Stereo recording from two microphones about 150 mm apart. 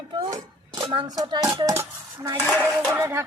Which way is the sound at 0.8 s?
30° right (ahead or behind).